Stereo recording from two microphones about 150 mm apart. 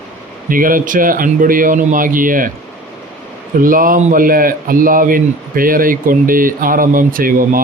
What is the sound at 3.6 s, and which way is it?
A man's voice, 70° right (ahead or behind).